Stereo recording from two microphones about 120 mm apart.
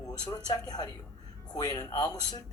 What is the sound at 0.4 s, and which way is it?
A man's voice, 35° left (ahead or behind).